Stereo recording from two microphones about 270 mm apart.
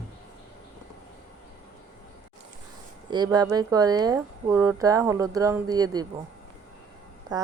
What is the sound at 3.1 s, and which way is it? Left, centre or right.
Speech, centre.